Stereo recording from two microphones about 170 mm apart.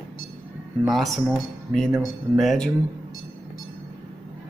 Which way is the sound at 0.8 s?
Centre (ahead or behind).